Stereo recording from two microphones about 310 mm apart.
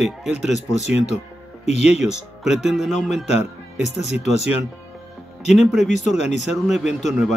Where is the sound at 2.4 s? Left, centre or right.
Centre.